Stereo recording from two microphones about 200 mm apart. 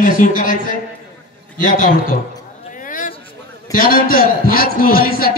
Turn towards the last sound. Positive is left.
turn(degrees=45)  # may be behind; listen again after turning